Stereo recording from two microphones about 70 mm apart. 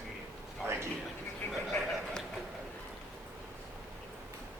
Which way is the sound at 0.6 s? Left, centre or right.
Right.